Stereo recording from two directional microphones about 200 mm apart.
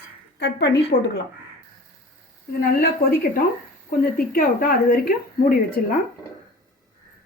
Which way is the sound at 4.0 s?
45° left (ahead or behind).